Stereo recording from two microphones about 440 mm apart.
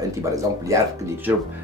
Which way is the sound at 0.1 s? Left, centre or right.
Centre.